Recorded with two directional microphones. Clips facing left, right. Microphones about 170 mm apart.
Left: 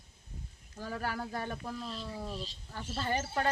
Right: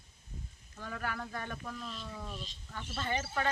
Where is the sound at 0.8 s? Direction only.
35° left (ahead or behind).